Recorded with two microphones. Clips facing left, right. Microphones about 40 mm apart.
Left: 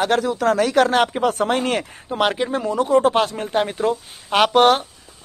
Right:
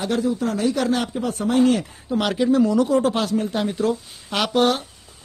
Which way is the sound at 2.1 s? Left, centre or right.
Left.